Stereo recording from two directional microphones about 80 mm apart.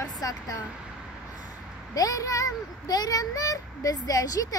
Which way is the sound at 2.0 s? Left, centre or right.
Left.